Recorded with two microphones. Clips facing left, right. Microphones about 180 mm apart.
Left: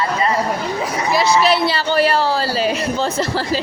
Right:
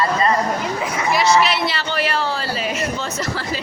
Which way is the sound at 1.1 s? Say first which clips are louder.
Left 2 dB; 30° left (ahead or behind).